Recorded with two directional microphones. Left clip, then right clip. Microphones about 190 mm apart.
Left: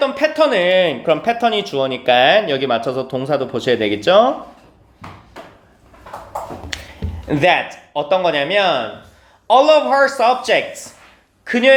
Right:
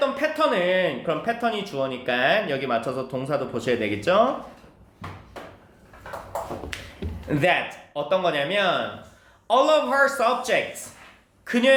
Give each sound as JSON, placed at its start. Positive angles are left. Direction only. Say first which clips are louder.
{"t": 0.0, "sound": "speech", "louder": "left 7 dB", "side_deg": 15}
{"t": 6.7, "sound": "music", "louder": "left 7 dB", "side_deg": 15}
{"t": 7.3, "sound": "speech", "louder": "left 7 dB", "side_deg": 15}